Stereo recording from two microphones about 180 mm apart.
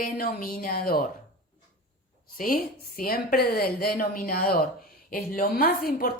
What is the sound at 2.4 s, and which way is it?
A woman's voice, 55° left (ahead or behind).